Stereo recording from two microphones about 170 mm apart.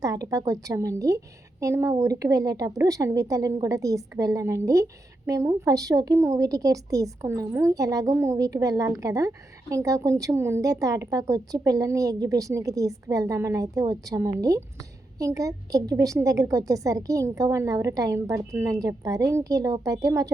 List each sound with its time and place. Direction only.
0.0 s a woman's voice: 20° right (ahead or behind)